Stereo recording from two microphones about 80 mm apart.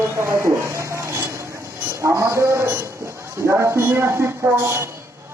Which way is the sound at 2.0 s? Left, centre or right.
Right.